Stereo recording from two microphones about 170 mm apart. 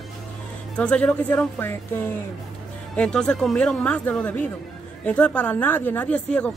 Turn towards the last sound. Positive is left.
turn(degrees=5)  # may be behind; listen again after turning